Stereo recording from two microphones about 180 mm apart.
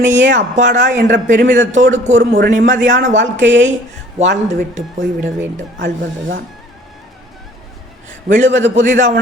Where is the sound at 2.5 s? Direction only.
45° right (ahead or behind).